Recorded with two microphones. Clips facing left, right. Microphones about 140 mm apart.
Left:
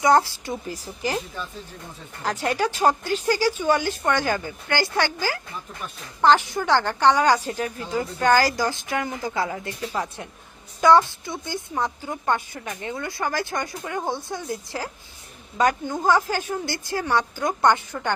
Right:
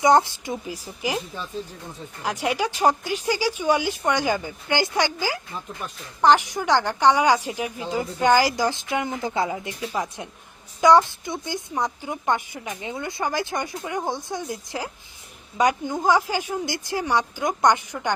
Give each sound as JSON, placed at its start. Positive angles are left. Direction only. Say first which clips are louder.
{"t": 0.0, "sound": "speech", "louder": "right 1 dB", "side_deg": -20}